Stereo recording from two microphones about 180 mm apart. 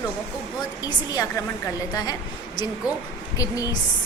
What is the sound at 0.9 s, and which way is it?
Speech, 20° left (ahead or behind).